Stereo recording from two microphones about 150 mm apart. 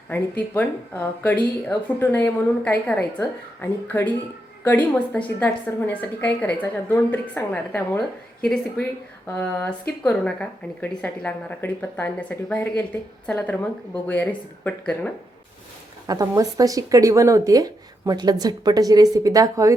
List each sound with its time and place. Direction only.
0.1 s a woman's voice: 10° left (ahead or behind)
9.4 s a woman's voice: 10° left (ahead or behind)
16.0 s speech: 20° right (ahead or behind)